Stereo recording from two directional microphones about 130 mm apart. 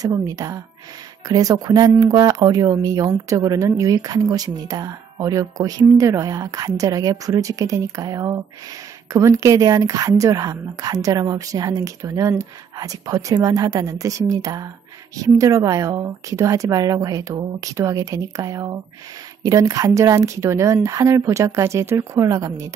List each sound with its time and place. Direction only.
0.0 s speech: 25° right (ahead or behind)